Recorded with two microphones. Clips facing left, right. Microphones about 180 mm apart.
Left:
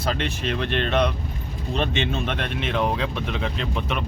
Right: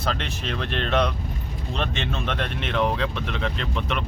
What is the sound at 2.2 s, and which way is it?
Speech, 5° left (ahead or behind).